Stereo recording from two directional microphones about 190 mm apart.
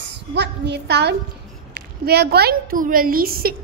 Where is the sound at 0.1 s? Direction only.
65° right (ahead or behind).